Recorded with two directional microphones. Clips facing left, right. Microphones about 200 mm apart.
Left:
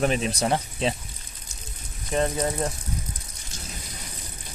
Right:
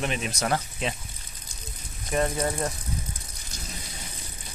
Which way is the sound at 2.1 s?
30° left (ahead or behind).